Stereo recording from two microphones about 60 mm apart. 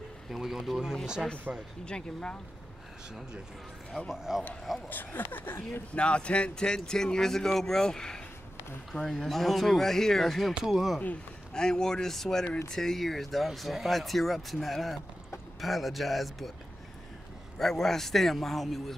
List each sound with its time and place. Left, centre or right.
0.3 s speech: centre
1.5 s speech: right
1.9 s speech: centre
4.1 s speech: centre
4.8 s speech: left
5.9 s speech: centre
11.5 s speech: centre
17.6 s speech: centre